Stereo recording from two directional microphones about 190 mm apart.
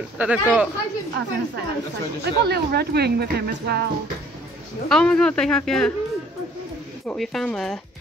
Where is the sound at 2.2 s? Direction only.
55° right (ahead or behind).